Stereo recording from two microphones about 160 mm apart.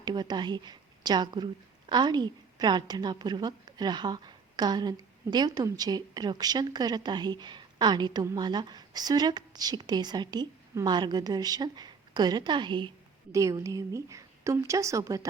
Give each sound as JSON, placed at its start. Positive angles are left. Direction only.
{"t": 0.0, "sound": "a woman's voice", "side_deg": -25}